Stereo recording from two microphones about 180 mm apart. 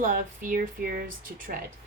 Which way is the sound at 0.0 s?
50° right (ahead or behind).